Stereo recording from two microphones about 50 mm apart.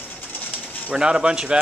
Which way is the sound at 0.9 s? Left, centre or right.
Centre.